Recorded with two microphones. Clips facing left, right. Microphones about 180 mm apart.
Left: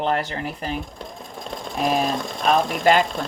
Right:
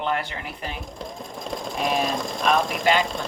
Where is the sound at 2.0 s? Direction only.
Centre (ahead or behind).